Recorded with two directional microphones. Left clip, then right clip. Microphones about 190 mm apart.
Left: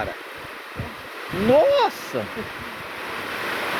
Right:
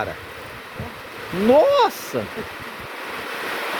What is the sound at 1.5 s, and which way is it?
Speech, 45° right (ahead or behind).